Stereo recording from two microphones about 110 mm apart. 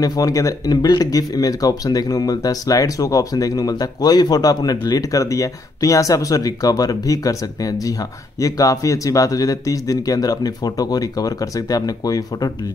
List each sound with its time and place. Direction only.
0.0 s speech: 35° left (ahead or behind)